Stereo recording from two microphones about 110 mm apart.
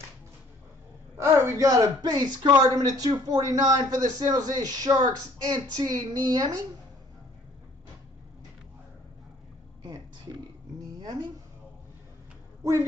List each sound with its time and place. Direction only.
1.1 s a man's voice: 25° right (ahead or behind)